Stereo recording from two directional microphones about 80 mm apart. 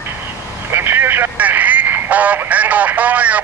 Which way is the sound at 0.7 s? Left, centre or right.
Right.